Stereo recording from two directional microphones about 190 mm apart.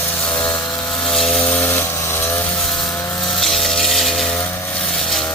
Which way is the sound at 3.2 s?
Centre (ahead or behind).